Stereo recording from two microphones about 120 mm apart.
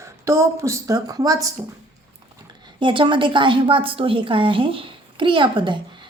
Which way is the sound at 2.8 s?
40° right (ahead or behind).